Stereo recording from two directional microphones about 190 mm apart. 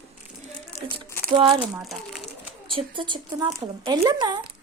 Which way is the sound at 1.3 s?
30° right (ahead or behind).